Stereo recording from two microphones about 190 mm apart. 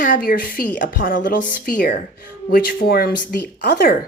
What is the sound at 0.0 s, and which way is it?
Speech, 45° left (ahead or behind).